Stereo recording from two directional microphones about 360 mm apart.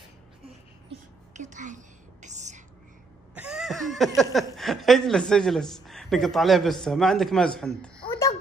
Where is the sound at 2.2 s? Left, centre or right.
Centre.